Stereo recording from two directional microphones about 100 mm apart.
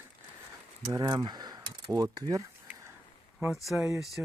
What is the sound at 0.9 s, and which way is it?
Speech, 40° right (ahead or behind).